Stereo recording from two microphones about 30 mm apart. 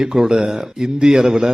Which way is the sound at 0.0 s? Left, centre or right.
Right.